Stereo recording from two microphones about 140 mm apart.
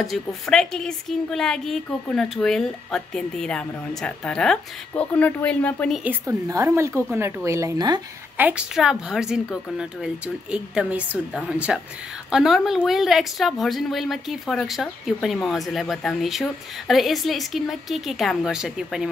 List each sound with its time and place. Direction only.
0.0 s a woman's voice: centre (ahead or behind)
6.0 s a woman's voice: 20° right (ahead or behind)
8.4 s a woman's voice: 10° right (ahead or behind)